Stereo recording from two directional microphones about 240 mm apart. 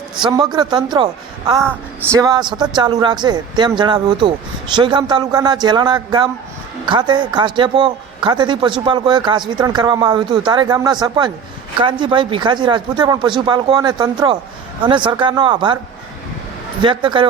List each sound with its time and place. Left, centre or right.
0.2 s speech: centre
16.8 s speech: centre